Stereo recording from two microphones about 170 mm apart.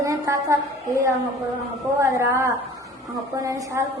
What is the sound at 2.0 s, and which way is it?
A woman's voice, 20° right (ahead or behind).